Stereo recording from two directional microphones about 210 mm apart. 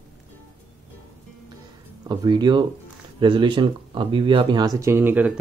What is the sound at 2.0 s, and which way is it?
Speech, 20° right (ahead or behind).